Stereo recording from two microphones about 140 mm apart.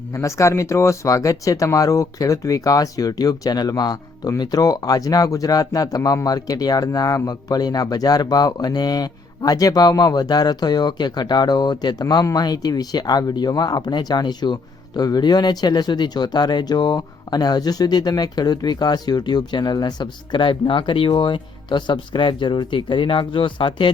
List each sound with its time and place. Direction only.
0.1 s speech: 20° left (ahead or behind); by 23.9 s 35° left (ahead or behind)